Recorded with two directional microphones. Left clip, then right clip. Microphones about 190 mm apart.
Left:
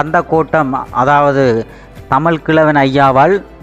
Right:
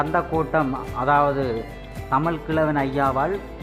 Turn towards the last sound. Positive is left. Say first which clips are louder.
# left 13 dB
turn(degrees=45)  # may be behind; listen again after turning